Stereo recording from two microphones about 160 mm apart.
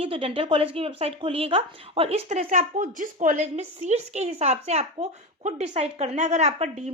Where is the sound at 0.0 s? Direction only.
35° right (ahead or behind).